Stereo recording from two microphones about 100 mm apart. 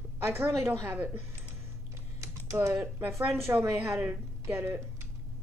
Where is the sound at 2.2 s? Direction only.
30° right (ahead or behind).